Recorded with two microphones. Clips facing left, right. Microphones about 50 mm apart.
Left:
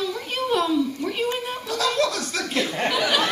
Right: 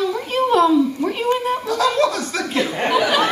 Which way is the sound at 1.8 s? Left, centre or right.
Centre.